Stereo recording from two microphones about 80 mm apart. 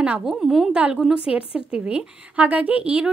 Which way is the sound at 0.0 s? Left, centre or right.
Centre.